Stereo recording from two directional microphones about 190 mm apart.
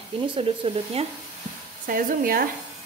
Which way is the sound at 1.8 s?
45° right (ahead or behind).